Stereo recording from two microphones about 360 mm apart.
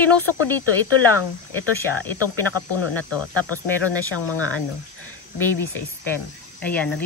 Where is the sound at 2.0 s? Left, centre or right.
Centre.